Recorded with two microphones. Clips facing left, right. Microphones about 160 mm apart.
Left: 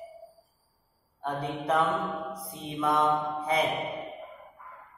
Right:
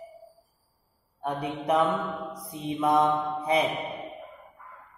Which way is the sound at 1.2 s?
15° right (ahead or behind).